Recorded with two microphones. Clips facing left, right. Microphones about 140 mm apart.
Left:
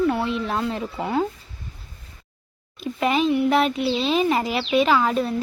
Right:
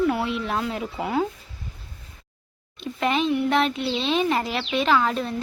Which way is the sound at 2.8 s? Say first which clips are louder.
Left 2 dB; 5° left (ahead or behind).